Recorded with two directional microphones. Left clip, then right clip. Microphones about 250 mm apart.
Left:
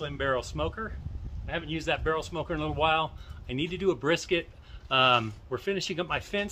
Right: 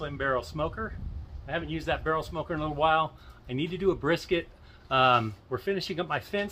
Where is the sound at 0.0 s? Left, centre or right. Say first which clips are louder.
Even; centre.